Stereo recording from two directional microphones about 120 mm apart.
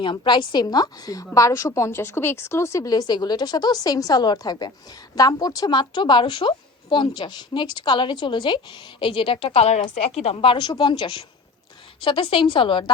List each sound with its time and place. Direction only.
0.0 s a woman's voice: 40° left (ahead or behind)